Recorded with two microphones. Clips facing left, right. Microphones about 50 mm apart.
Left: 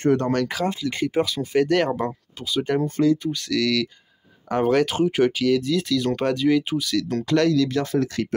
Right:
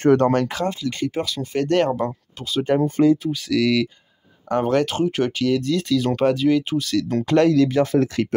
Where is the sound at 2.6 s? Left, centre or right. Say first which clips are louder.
Right 4 dB; centre.